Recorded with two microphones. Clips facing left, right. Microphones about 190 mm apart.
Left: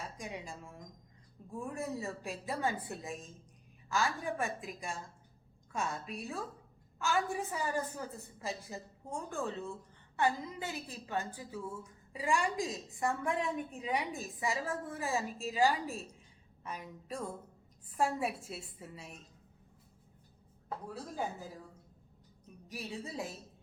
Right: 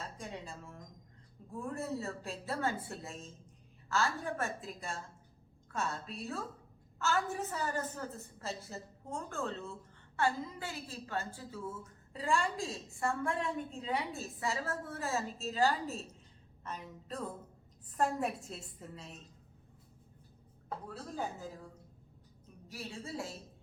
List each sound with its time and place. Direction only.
0.0 s a sound: 15° left (ahead or behind)
1.5 s a woman's voice: 15° left (ahead or behind)
22.6 s speech: 20° left (ahead or behind)